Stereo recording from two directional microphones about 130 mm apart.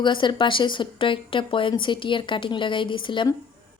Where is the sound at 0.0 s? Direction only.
35° left (ahead or behind).